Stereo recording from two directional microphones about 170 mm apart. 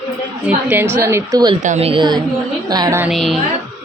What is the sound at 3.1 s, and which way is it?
Speech, centre (ahead or behind).